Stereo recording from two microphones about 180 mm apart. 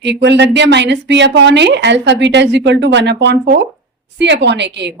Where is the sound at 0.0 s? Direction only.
75° right (ahead or behind).